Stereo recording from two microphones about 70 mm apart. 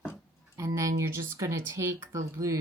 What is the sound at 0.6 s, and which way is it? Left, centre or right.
Speech, right.